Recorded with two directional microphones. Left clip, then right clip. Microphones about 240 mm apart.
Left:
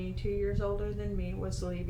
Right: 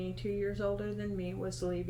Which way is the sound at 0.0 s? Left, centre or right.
Centre.